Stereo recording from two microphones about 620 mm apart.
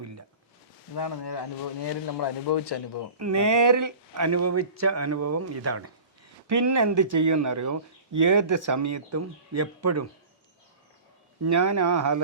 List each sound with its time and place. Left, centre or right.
0.9 s a man's voice: left
3.2 s speech: right
11.4 s speech: right